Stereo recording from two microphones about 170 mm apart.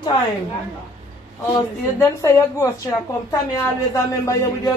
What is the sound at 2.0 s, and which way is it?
Speech, 15° left (ahead or behind).